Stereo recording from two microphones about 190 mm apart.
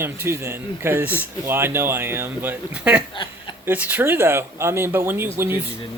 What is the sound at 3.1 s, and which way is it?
Chuckle, 25° left (ahead or behind).